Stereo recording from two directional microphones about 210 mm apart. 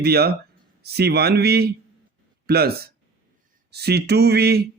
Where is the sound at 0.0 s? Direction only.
50° right (ahead or behind).